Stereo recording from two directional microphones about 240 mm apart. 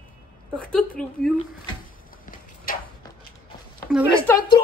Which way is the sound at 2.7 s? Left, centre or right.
Left.